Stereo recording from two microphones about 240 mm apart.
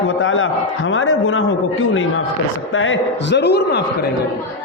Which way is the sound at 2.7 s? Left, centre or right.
Left.